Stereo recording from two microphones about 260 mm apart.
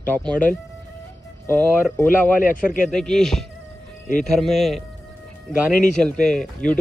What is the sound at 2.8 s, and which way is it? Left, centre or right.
Speech, centre.